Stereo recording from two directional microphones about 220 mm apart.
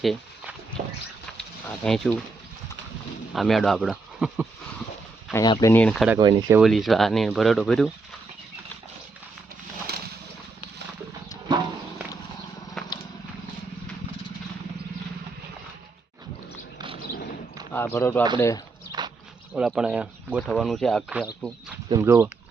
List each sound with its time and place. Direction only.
0.0 s a sound: centre (ahead or behind)
1.4 s speech: 5° left (ahead or behind)
3.3 s speech: centre (ahead or behind)
5.3 s speech: 20° left (ahead or behind)
5.7 s speech: 5° left (ahead or behind)
6.1 s speech: 15° right (ahead or behind)
6.6 s speech: centre (ahead or behind)
11.4 s a sound: 20° right (ahead or behind)
12.8 s vehicle: centre (ahead or behind)
16.7 s bird: 25° right (ahead or behind)
17.9 s speech: 10° left (ahead or behind)
18.9 s horse: 20° right (ahead or behind)
19.5 s speech: 5° right (ahead or behind)
21.8 s speech: 15° right (ahead or behind)